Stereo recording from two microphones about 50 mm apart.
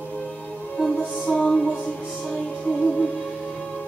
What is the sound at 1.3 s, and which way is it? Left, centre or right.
Music, centre.